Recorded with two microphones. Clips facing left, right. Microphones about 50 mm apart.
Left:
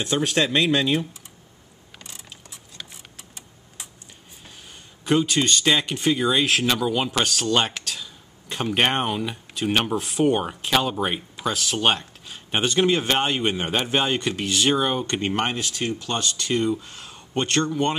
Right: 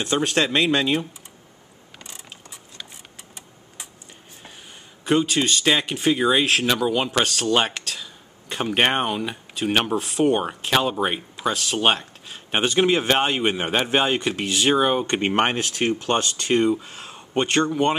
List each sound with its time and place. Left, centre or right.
0.0 s speech: centre
5.0 s speech: centre
15.0 s speech: right